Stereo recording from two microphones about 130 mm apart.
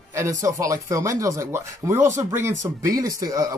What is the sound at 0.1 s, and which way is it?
Speech, 25° right (ahead or behind).